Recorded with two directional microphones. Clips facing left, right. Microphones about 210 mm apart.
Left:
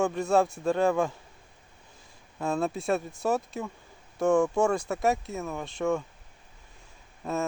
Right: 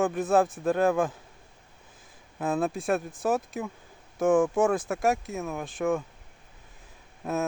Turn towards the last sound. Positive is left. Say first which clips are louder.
# right 1 dB
turn(degrees=-5)  # may be behind; listen again after turning